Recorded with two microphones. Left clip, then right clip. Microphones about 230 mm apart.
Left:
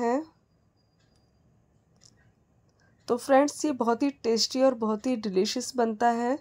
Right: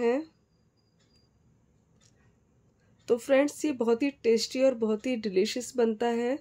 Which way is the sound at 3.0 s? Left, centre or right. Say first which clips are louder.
Left 2 dB; centre.